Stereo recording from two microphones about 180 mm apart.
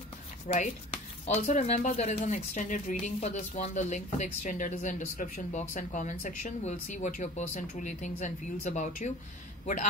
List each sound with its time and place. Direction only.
0.5 s speech: 45° left (ahead or behind)